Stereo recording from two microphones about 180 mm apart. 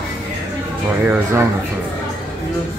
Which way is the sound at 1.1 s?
15° right (ahead or behind).